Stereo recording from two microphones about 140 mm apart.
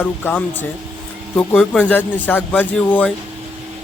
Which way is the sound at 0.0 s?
10° left (ahead or behind).